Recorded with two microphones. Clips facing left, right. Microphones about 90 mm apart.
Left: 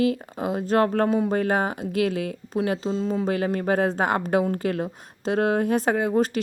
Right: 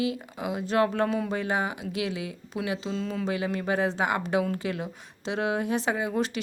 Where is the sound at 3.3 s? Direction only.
45° left (ahead or behind).